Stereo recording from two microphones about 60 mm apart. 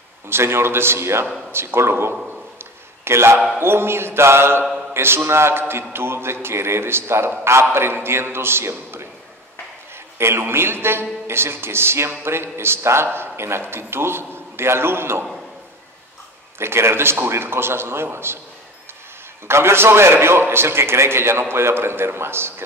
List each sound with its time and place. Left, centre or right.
0.3 s a man's voice: right
2.6 s a sound: right
3.5 s a man's voice: right
10.1 s a man's voice: right
16.5 s a man's voice: right
19.4 s a man's voice: right